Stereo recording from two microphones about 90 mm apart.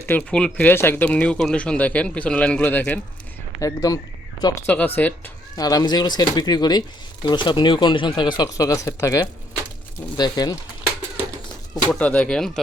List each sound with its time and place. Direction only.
0.2 s speech: 10° left (ahead or behind)
1.0 s speech: 15° left (ahead or behind)
3.6 s speech: 40° left (ahead or behind)
4.6 s speech: 20° left (ahead or behind)
5.5 s speech: 45° left (ahead or behind)
8.5 s speech: 40° left (ahead or behind)
10.2 s speech: 50° left (ahead or behind)
11.9 s speech: 15° left (ahead or behind)